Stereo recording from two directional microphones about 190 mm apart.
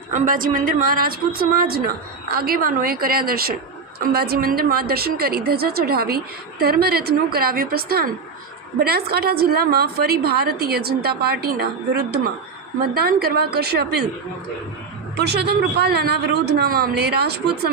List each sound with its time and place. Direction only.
0.1 s a woman's voice: 45° right (ahead or behind)
15.1 s a woman's voice: 60° right (ahead or behind)